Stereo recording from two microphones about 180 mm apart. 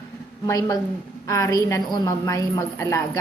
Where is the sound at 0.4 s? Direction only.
20° left (ahead or behind).